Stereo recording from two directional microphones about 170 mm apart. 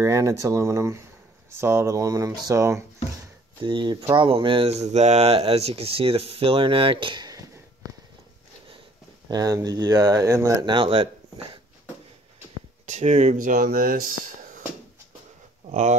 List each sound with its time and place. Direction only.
0.0 s speech: 15° right (ahead or behind)
9.3 s speech: 20° right (ahead or behind)
12.8 s speech: 40° right (ahead or behind)
15.7 s speech: 45° right (ahead or behind)